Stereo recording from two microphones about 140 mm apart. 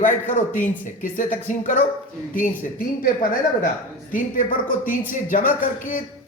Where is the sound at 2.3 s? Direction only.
80° left.